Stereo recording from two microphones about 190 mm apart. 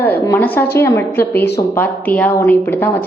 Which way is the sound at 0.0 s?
10° left (ahead or behind).